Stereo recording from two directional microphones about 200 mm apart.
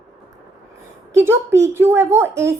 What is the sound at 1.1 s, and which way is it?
A child's voice, 10° right (ahead or behind).